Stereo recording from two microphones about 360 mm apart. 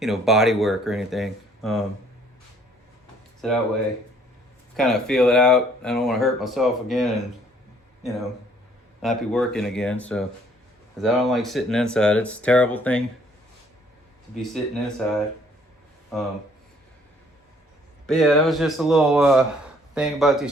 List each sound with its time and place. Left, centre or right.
0.0 s speech: centre
3.4 s speech: centre
4.8 s speech: centre
9.0 s speech: centre
14.4 s speech: centre
18.0 s speech: centre